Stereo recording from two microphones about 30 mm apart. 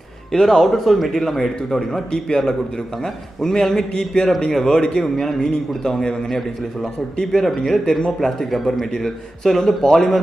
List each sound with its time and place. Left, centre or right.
0.3 s speech: centre
0.6 s speech: centre
2.1 s a man's voice: left
5.1 s a man's voice: centre
9.8 s a man's voice: centre